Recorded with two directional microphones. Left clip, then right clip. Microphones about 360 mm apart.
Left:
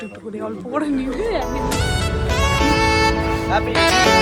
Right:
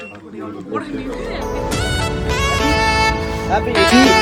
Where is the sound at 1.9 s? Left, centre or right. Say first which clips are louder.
Right 2 dB; centre.